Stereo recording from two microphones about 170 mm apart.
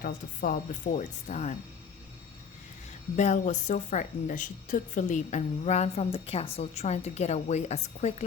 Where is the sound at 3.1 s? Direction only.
45° left (ahead or behind).